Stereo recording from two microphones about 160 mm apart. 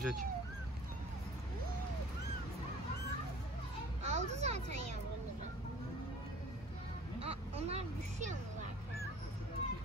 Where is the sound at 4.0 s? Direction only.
45° right (ahead or behind).